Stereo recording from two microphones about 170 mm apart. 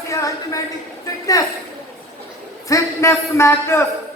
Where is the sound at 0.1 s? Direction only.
20° left (ahead or behind).